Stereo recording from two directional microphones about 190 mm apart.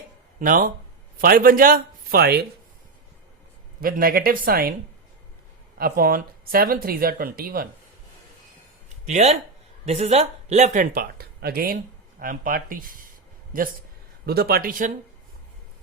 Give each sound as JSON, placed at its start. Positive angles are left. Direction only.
{"t": 0.3, "sound": "speech", "side_deg": -45}
{"t": 3.8, "sound": "speech", "side_deg": -50}
{"t": 5.7, "sound": "speech", "side_deg": -50}
{"t": 9.0, "sound": "speech", "side_deg": -35}